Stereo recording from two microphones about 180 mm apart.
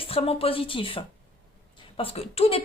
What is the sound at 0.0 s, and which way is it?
Speech, 30° left (ahead or behind).